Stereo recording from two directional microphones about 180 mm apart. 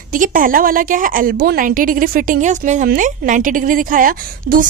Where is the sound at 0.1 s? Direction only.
50° right (ahead or behind).